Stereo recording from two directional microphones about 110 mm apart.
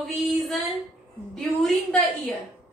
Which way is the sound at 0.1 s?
Centre (ahead or behind).